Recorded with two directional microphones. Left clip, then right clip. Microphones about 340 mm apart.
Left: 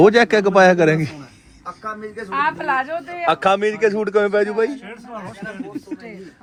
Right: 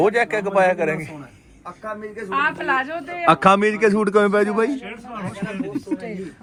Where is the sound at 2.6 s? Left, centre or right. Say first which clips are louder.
Left 1 dB; left.